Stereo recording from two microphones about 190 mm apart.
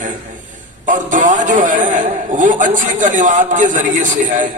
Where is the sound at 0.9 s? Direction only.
40° right (ahead or behind).